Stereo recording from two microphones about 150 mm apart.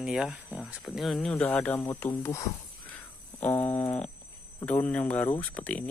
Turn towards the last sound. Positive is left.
turn(degrees=10)  # may be behind; listen again after turning